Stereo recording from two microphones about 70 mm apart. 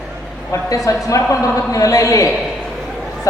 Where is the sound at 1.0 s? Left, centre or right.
Left.